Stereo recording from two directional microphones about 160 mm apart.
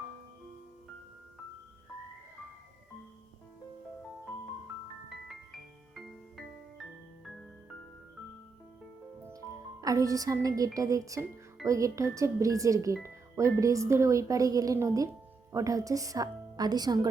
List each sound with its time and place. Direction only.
5.0 s music: centre (ahead or behind)
9.8 s speech: 20° right (ahead or behind)